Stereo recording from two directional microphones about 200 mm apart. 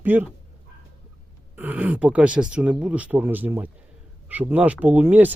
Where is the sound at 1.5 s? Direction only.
10° right (ahead or behind).